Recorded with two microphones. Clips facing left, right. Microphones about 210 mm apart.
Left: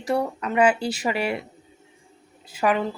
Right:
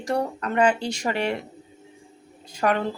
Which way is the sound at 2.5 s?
5° left (ahead or behind).